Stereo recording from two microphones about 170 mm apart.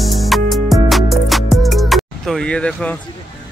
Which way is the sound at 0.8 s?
Centre (ahead or behind).